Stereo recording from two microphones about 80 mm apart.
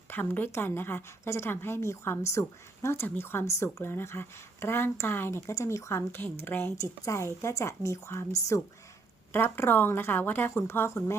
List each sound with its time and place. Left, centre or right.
0.1 s speech: left
7.0 s a woman's voice: left
9.3 s a woman's voice: left